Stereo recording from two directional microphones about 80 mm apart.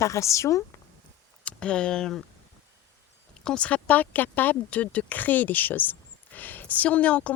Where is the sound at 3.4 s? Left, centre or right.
Centre.